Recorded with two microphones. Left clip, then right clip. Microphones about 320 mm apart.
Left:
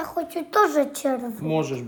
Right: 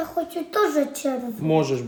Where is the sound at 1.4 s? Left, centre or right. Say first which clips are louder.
Right 7 dB; centre.